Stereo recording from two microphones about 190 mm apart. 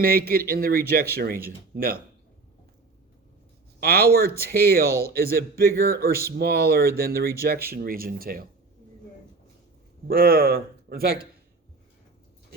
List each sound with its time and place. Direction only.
0.0 s a man's voice: 50° right (ahead or behind)
3.8 s a man's voice: 55° right (ahead or behind)
10.1 s a man's voice: 50° right (ahead or behind)